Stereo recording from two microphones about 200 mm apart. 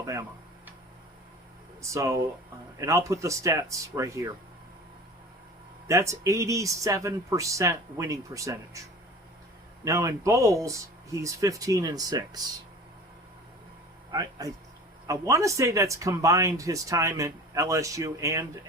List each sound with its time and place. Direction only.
0.0 s tick-tock: 15° right (ahead or behind)
1.8 s speech: 15° right (ahead or behind)
5.9 s speech: 15° right (ahead or behind)
9.8 s speech: 15° right (ahead or behind)
14.1 s speech: 20° right (ahead or behind)